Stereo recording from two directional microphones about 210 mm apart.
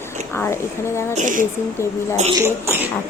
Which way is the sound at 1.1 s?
35° right (ahead or behind).